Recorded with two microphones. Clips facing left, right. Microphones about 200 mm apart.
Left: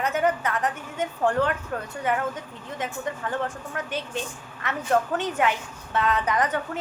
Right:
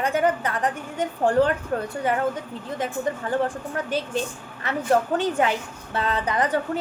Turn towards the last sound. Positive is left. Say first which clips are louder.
# right 2 dB
turn(degrees=-30)  # may be behind; listen again after turning